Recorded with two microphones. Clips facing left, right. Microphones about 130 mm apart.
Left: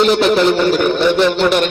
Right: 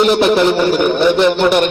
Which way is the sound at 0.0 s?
10° right (ahead or behind).